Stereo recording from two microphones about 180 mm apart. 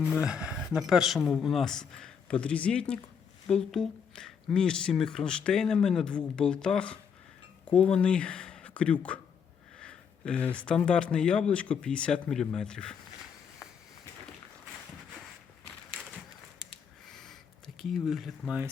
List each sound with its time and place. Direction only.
0.0 s speech: 5° right (ahead or behind)
16.6 s a sound: 5° left (ahead or behind)
17.7 s speech: centre (ahead or behind)